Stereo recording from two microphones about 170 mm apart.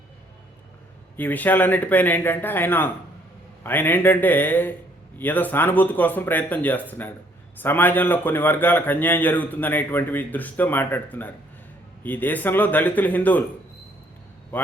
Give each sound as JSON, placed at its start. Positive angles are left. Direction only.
{"t": 1.1, "sound": "a man's voice", "side_deg": 10}